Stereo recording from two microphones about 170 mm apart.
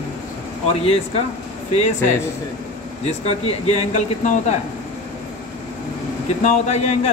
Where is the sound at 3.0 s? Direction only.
40° left (ahead or behind).